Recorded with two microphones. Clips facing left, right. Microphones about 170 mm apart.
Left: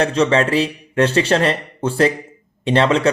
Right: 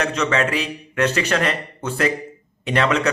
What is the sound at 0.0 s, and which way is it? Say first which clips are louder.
A man's voice: left 5 dB; 30° left (ahead or behind).